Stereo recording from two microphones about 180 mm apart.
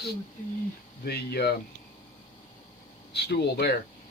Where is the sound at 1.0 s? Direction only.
60° left (ahead or behind).